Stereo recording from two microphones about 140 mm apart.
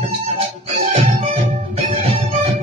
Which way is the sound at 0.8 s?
50° right (ahead or behind).